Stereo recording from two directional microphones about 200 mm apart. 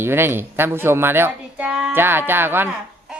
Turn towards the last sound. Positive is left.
turn(degrees=-10)  # may be behind; listen again after turning